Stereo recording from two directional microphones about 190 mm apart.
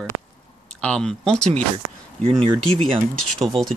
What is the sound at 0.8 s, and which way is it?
Speech, 5° left (ahead or behind).